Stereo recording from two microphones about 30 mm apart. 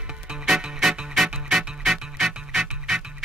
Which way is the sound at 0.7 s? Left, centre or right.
Centre.